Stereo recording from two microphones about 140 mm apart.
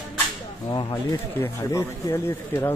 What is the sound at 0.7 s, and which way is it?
Speech, 25° left (ahead or behind).